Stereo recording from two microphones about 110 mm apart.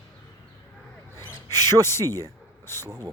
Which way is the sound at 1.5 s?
25° left (ahead or behind).